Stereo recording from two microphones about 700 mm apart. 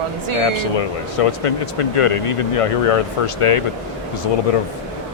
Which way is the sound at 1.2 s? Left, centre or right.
Left.